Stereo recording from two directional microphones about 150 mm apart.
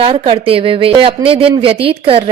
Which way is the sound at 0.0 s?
40° right (ahead or behind).